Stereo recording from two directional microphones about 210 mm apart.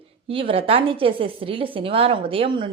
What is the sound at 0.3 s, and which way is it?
A woman's voice, 25° right (ahead or behind).